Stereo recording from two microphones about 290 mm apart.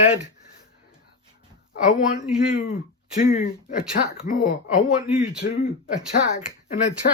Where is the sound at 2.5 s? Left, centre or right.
Left.